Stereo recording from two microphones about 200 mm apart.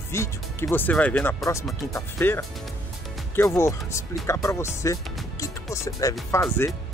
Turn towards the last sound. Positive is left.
turn(degrees=15)  # may be behind; listen again after turning